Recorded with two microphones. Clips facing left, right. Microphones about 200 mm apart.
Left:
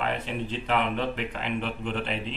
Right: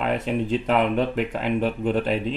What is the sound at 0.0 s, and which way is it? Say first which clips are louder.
Speech: right 6 dB; 45° right (ahead or behind).